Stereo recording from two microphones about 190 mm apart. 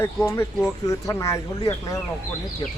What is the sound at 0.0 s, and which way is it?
Speech, 15° left (ahead or behind).